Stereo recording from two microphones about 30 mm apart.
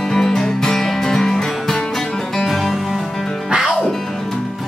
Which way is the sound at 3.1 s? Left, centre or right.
Centre.